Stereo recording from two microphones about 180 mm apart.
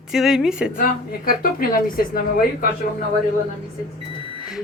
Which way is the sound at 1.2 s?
55° left (ahead or behind).